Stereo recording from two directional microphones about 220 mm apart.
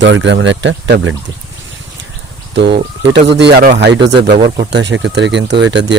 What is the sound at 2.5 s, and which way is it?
Speech, 50° right (ahead or behind).